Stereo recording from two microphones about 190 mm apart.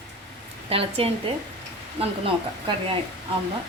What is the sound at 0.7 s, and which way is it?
A woman's voice, 30° right (ahead or behind).